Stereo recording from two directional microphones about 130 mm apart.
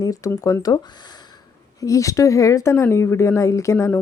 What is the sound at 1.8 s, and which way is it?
Speech, 25° left (ahead or behind).